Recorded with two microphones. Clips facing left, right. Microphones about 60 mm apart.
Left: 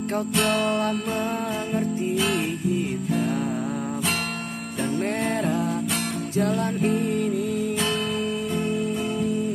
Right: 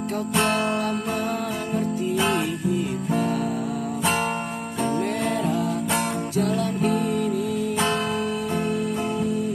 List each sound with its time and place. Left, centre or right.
0.3 s music: right
0.8 s music: left
2.1 s music: right
4.0 s music: right
5.3 s music: left
7.8 s music: right